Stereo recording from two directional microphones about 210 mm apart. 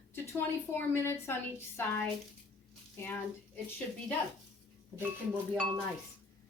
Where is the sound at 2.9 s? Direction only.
10° left (ahead or behind).